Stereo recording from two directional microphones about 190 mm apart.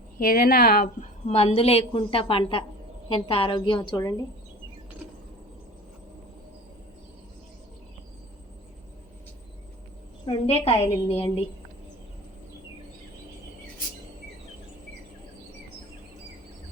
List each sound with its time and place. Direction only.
0.2 s a woman's voice: 50° left (ahead or behind); by 4.1 s 20° left (ahead or behind)
10.2 s a woman's voice: 30° left (ahead or behind)